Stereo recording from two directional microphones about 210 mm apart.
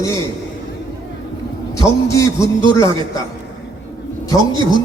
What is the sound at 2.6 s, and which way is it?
Speech, 25° right (ahead or behind).